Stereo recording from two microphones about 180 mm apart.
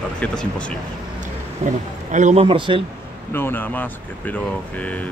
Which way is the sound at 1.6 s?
45° right (ahead or behind).